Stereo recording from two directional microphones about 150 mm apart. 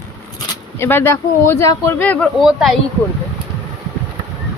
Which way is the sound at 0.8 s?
15° left (ahead or behind).